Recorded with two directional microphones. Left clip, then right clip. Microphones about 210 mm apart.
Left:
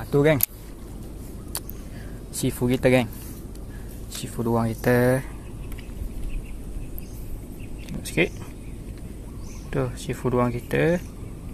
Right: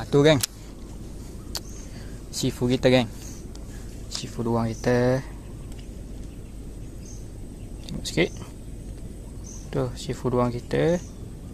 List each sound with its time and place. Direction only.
0.0 s speech: 15° right (ahead or behind)
2.3 s speech: centre (ahead or behind)
4.1 s speech: centre (ahead or behind)
8.2 s speech: 10° right (ahead or behind)
9.7 s speech: centre (ahead or behind)